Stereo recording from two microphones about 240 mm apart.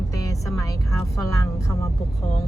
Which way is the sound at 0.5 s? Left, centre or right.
Centre.